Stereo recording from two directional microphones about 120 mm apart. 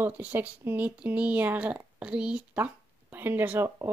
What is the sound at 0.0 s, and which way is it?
Speech, 15° right (ahead or behind).